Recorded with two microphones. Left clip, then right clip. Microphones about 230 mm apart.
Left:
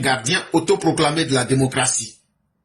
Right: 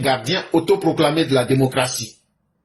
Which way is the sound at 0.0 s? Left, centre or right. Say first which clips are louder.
Even; left.